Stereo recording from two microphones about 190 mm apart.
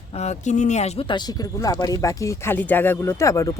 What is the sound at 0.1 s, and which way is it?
Speech, 35° left (ahead or behind).